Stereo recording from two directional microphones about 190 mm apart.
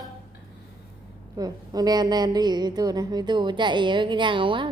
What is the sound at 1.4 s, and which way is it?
A woman's voice, 20° right (ahead or behind).